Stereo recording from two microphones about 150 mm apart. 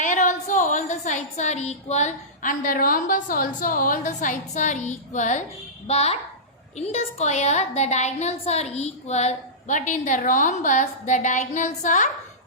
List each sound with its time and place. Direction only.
0.0 s a woman's voice: 55° left (ahead or behind)
5.9 s a woman's voice: 45° left (ahead or behind)